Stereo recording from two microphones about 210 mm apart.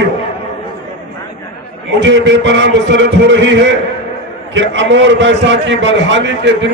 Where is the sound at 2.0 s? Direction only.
60° right (ahead or behind).